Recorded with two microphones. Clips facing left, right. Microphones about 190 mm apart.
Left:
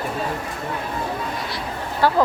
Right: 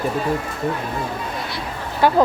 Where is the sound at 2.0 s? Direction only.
15° right (ahead or behind).